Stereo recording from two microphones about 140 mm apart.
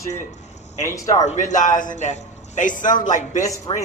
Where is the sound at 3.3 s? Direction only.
25° left (ahead or behind).